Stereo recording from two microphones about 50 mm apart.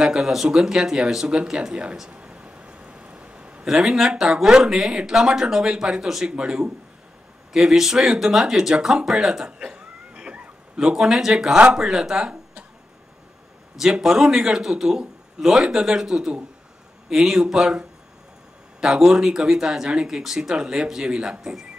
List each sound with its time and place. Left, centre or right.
0.0 s speech: centre
2.0 s a sound: right
3.6 s a man's voice: centre; by 10.9 s right
11.0 s speech: centre
11.5 s speech: right
11.8 s speech: centre
13.7 s a man's voice: centre